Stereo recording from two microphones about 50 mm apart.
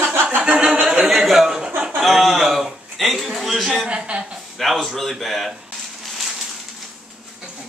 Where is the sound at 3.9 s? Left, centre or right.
Right.